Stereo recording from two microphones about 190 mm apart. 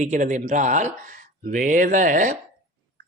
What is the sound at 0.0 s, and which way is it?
Speech, 40° right (ahead or behind).